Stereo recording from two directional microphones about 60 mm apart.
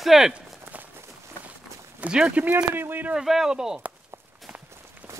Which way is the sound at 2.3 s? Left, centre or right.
Right.